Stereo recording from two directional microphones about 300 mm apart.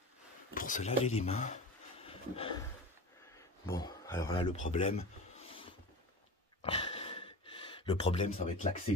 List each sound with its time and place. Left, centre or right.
0.6 s speech: left
3.6 s speech: centre
4.6 s a sound: left